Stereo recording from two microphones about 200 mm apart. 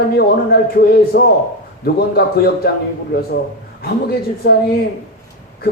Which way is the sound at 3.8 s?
50° left (ahead or behind).